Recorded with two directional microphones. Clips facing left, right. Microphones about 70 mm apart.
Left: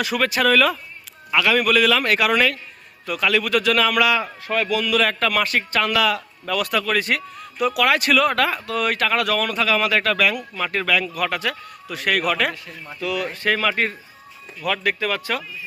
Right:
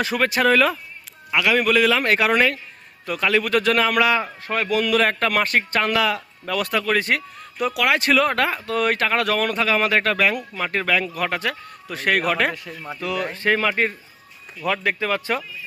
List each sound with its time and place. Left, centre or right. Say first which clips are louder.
0.0 s a man's voice: even; right